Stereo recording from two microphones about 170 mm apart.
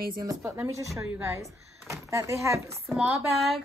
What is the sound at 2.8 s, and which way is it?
Speech, centre (ahead or behind).